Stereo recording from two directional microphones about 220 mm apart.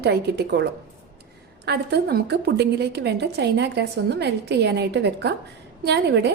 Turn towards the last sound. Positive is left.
turn(degrees=-50)  # may be behind; listen again after turning